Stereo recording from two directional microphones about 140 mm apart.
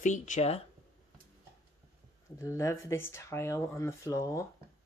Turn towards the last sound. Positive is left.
turn(degrees=20)  # may be behind; listen again after turning